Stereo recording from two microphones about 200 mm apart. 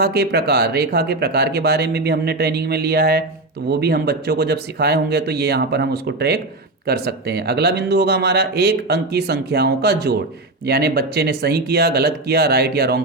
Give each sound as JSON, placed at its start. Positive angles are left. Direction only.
{"t": 0.0, "sound": "speech", "side_deg": -55}